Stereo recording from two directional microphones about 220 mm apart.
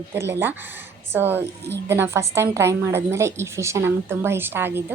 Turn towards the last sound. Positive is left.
turn(degrees=-10)  # may be behind; listen again after turning